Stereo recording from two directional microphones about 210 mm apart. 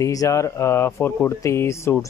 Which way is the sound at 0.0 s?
15° left (ahead or behind).